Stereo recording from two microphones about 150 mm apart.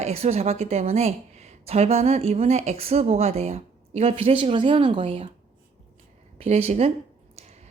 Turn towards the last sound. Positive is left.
turn(degrees=-50)  # may be behind; listen again after turning